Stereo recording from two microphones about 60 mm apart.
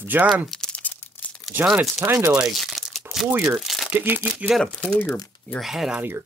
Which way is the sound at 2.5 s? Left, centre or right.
Centre.